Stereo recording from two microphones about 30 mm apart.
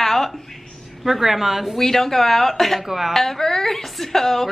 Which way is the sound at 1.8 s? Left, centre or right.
Centre.